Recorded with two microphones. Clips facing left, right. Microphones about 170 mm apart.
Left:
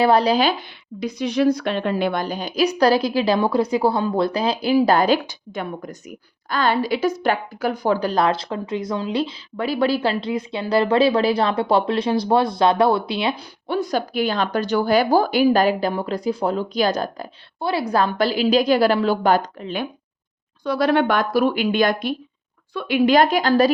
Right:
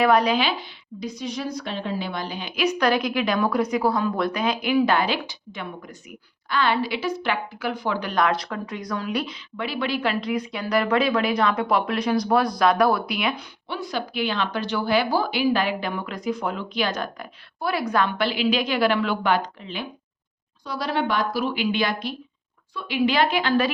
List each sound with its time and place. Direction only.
0.0 s speech: 30° left (ahead or behind)
0.9 s a woman's voice: 65° left (ahead or behind)
2.2 s a woman's voice: 40° left (ahead or behind)
13.7 s speech: 45° left (ahead or behind)
20.7 s a woman's voice: 60° left (ahead or behind)
22.7 s a woman's voice: 60° left (ahead or behind); by 23.7 s 40° left (ahead or behind)